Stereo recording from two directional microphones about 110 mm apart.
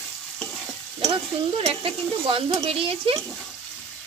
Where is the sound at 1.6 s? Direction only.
60° right (ahead or behind).